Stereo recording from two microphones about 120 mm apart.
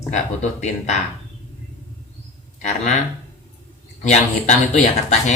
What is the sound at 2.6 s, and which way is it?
Speech, 75° left (ahead or behind).